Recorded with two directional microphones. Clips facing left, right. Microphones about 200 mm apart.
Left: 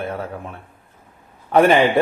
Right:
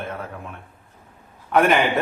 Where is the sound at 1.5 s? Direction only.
30° left (ahead or behind).